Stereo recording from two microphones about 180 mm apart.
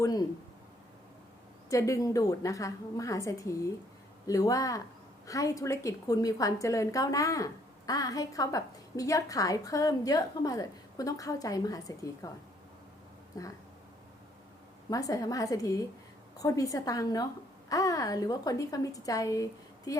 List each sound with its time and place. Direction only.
0.0 s speech: 20° left (ahead or behind)
1.7 s a woman's voice: 15° left (ahead or behind)
13.3 s a woman's voice: 20° left (ahead or behind)
14.8 s a woman's voice: 20° left (ahead or behind)